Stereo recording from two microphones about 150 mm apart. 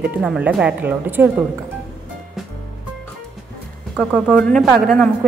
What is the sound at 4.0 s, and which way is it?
Speech, 10° left (ahead or behind).